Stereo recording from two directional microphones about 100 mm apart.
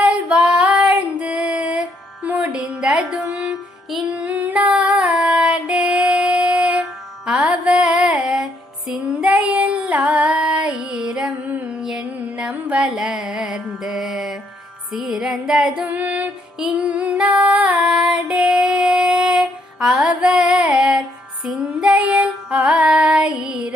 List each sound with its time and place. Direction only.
0.0 s female singing: 10° right (ahead or behind)
7.3 s music: 10° right (ahead or behind)
9.2 s child singing: 15° right (ahead or behind)
14.9 s female singing: 5° right (ahead or behind)
16.0 s music: 15° right (ahead or behind)
16.6 s female singing: 15° right (ahead or behind)